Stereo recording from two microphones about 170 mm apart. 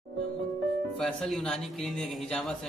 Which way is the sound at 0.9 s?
5° left (ahead or behind).